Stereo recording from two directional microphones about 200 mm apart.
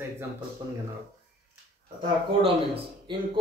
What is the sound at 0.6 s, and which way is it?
Speech, 20° right (ahead or behind).